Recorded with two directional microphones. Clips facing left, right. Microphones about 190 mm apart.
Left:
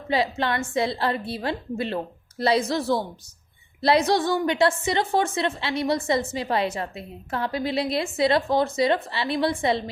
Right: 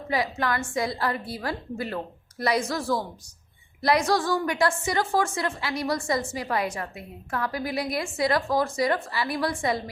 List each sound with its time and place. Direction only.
0.1 s a woman's voice: 25° left (ahead or behind)